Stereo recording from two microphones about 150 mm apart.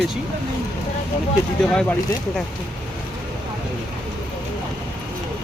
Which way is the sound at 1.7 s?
5° left (ahead or behind).